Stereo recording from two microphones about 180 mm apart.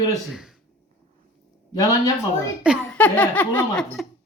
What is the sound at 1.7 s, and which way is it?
Speech, 20° left (ahead or behind).